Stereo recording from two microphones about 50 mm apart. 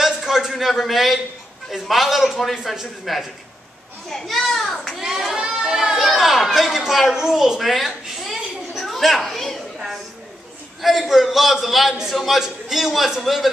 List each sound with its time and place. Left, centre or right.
0.0 s a sound: centre
0.5 s a man's voice: centre
4.1 s a child's voice: centre
5.3 s goat: centre
5.8 s a woman's voice: centre
10.8 s a man's voice: centre